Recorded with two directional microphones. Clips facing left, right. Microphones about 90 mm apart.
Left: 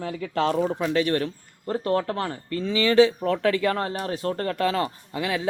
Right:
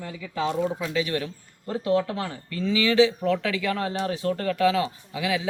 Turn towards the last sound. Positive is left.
turn(degrees=45)  # may be behind; listen again after turning